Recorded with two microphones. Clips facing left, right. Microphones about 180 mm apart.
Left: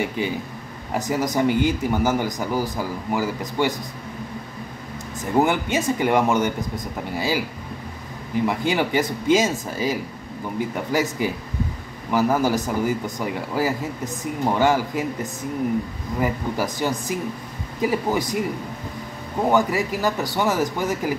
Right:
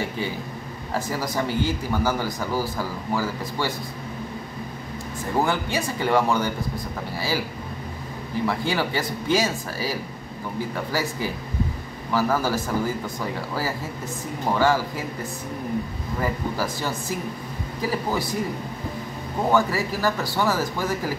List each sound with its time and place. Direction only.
0.2 s speech: 15° left (ahead or behind)
5.4 s speech: 20° left (ahead or behind)
8.5 s speech: 20° left (ahead or behind)
16.2 s speech: 15° left (ahead or behind)
19.5 s speech: 15° left (ahead or behind)